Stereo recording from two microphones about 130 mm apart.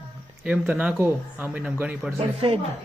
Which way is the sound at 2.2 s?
45° right (ahead or behind).